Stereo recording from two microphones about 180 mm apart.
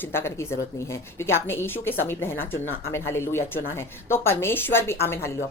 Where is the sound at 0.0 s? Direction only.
15° left (ahead or behind).